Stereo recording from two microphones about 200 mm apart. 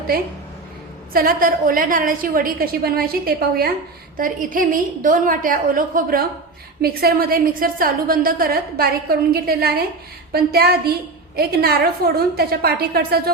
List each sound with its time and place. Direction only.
1.1 s a woman's voice: 45° right (ahead or behind)